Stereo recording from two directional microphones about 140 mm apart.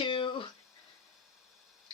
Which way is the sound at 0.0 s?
35° left (ahead or behind).